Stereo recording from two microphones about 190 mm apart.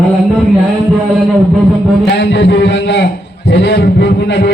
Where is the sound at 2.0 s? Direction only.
65° left (ahead or behind).